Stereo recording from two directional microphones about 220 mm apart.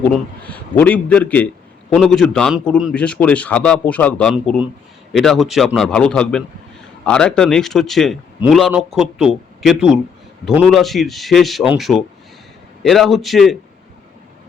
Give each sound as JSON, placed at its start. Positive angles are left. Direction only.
{"t": 0.0, "sound": "a man's voice", "side_deg": 5}